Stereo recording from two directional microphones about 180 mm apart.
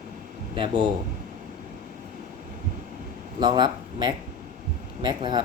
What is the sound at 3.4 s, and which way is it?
Speech, 25° right (ahead or behind).